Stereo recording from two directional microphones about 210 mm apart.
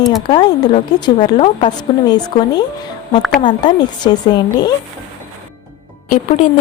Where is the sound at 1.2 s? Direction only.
30° left (ahead or behind).